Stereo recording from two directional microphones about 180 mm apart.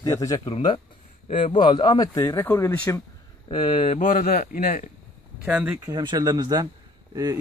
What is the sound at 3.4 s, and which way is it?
Speech, 25° left (ahead or behind).